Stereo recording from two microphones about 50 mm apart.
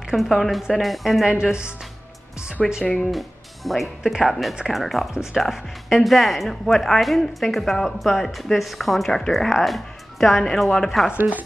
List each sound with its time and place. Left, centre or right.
0.1 s speech: centre
1.2 s a woman's voice: centre
2.9 s speech: centre
4.0 s a woman's voice: centre
4.3 s speech: centre
5.1 s a woman's voice: centre
5.4 s speech: centre
11.1 s chopping: right